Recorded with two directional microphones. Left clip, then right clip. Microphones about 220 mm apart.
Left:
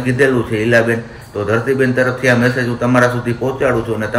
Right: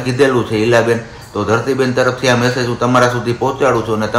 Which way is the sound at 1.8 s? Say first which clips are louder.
Even; 15° right (ahead or behind).